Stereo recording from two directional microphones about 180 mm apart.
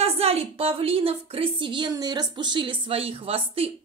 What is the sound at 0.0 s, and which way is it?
A woman's voice, 35° right (ahead or behind).